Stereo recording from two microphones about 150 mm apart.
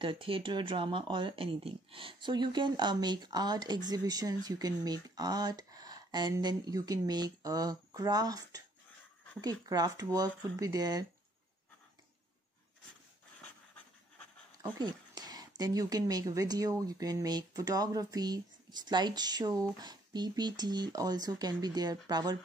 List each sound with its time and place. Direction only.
0.0 s speech: 35° right (ahead or behind)
14.6 s speech: 25° right (ahead or behind)